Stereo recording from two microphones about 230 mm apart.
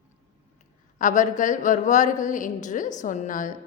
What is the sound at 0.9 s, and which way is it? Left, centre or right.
A woman's voice, left.